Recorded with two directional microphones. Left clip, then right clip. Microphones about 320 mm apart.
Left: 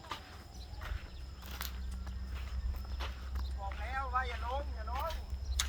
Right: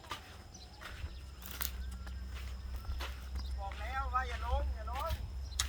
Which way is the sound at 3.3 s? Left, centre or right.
Centre.